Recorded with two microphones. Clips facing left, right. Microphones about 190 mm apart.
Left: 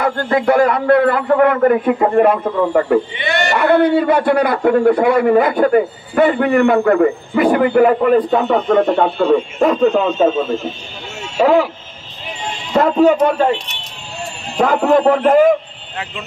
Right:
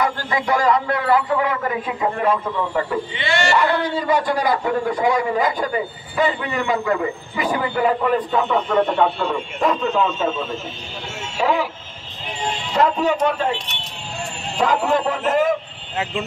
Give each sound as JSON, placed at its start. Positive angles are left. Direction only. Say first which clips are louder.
{"t": 0.0, "sound": "a man's voice", "louder": "left 7 dB", "side_deg": 60}
{"t": 11.3, "sound": "speech", "louder": "left 8 dB", "side_deg": 50}
{"t": 12.7, "sound": "speech", "louder": "left 7 dB", "side_deg": 50}
{"t": 14.6, "sound": "a man's voice", "louder": "left 6 dB", "side_deg": 55}